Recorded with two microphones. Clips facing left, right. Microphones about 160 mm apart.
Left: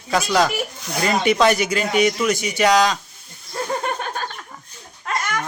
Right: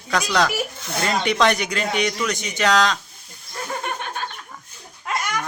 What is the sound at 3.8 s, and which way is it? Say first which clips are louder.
Chuckle: left 3 dB; 40° left (ahead or behind).